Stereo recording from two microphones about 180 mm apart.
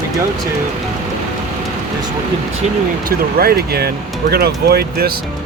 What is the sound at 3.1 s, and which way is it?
Speech, 55° right (ahead or behind).